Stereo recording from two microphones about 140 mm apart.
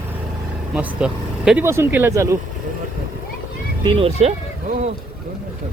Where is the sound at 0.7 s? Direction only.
10° right (ahead or behind).